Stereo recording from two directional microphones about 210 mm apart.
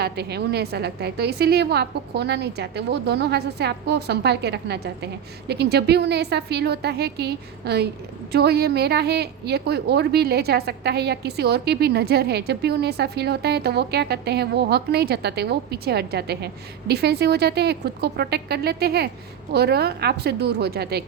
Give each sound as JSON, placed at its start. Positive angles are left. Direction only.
{"t": 0.0, "sound": "a woman's voice", "side_deg": -50}